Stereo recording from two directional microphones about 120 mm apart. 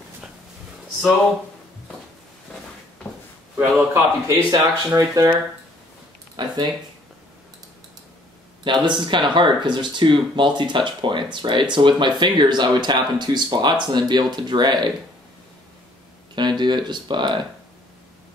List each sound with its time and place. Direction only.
3.5 s a man's voice: 15° right (ahead or behind)
4.5 s speech: 35° right (ahead or behind)
6.3 s speech: 35° right (ahead or behind)
8.6 s speech: 40° right (ahead or behind)
16.3 s speech: 40° right (ahead or behind)